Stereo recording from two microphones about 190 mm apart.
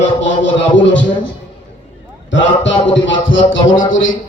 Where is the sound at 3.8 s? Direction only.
90° left.